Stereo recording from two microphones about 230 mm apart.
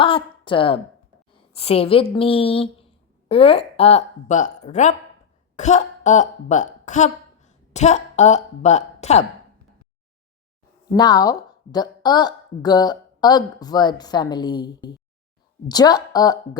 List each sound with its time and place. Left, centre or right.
0.0 s a woman's voice: left
10.9 s a woman's voice: centre